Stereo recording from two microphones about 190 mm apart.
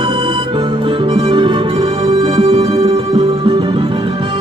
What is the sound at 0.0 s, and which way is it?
Music, 25° right (ahead or behind).